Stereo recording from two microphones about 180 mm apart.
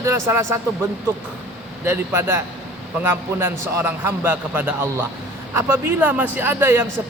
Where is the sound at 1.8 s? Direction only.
15° right (ahead or behind).